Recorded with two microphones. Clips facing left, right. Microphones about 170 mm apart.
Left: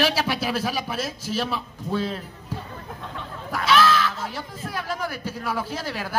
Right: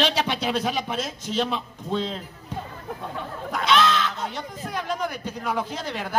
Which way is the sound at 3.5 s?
20° right (ahead or behind).